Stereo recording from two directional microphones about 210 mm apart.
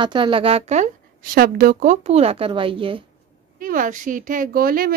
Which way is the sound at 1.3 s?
45° right (ahead or behind).